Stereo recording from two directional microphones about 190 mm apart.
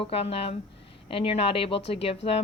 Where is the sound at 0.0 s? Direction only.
30° left (ahead or behind).